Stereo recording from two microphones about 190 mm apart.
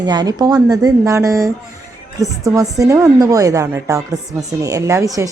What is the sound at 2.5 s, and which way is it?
A woman's voice, 15° right (ahead or behind).